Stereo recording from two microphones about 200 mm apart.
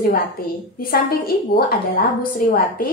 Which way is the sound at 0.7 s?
45° left (ahead or behind).